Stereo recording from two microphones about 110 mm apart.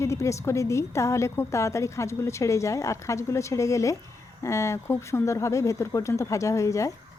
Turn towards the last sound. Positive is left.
turn(degrees=30)  # may be behind; listen again after turning